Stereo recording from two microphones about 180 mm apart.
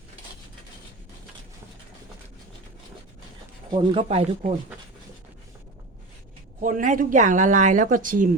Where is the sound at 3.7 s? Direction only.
25° right (ahead or behind).